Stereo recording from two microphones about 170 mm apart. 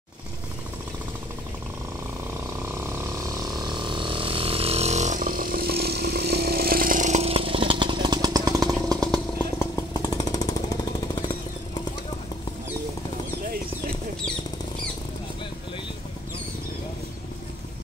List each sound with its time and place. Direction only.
3.6 s vehicle: 30° right (ahead or behind)
8.5 s chainsaw: 5° left (ahead or behind)
9.6 s jackhammer: 20° left (ahead or behind)